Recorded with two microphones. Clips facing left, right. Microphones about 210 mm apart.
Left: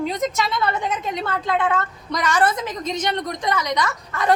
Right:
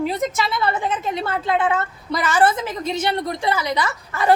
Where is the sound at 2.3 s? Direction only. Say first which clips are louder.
Right 3 dB; 25° right (ahead or behind).